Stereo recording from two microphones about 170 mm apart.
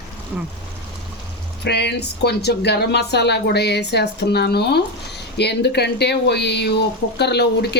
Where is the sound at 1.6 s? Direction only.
80° left.